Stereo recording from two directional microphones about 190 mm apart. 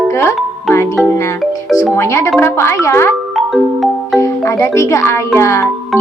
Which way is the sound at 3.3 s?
Centre (ahead or behind).